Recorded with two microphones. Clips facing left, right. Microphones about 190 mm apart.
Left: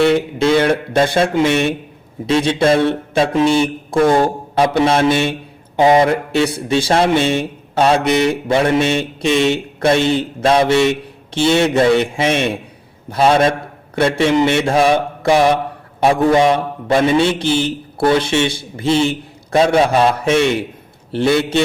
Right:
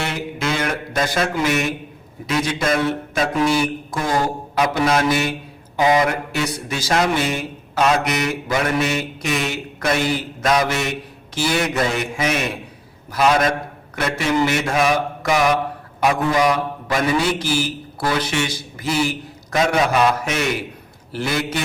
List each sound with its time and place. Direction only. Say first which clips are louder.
0.1 s a man's voice: left 10 dB; 30° left (ahead or behind)